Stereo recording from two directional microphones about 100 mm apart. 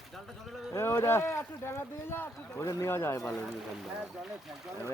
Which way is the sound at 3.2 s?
5° left (ahead or behind).